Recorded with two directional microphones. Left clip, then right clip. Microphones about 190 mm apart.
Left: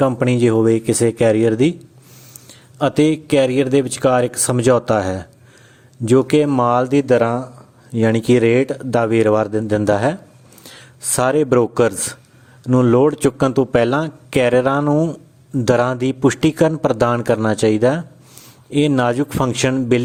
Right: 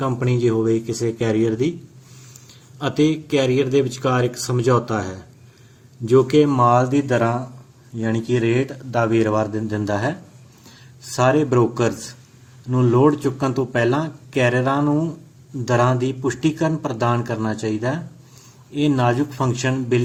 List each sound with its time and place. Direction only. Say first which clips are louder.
0.0 s a man's voice: left 5 dB; 45° left (ahead or behind)